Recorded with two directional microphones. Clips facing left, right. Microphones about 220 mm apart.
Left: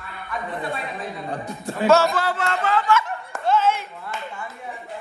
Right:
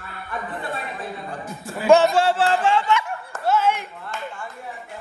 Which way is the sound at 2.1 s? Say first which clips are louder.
Right 5 dB; 30° right (ahead or behind).